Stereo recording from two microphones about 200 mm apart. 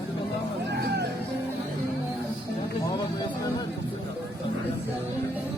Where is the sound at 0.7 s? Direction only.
55° right (ahead or behind).